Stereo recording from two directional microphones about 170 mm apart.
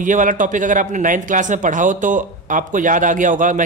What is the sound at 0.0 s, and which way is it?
A man's voice, 50° right (ahead or behind).